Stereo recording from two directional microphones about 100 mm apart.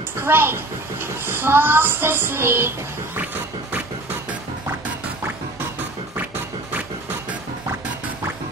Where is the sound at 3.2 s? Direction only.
15° right (ahead or behind).